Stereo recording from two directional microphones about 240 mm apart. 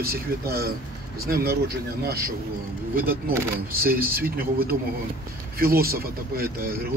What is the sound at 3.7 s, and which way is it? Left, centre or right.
Speech, right.